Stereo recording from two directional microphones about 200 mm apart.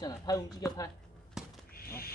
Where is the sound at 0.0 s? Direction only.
15° left (ahead or behind).